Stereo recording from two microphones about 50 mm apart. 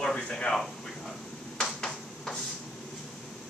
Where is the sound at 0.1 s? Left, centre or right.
Centre.